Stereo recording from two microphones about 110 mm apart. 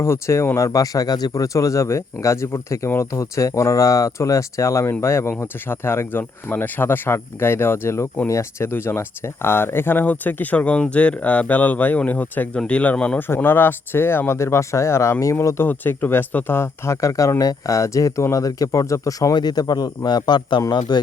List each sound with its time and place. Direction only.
0.0 s speech: 25° left (ahead or behind)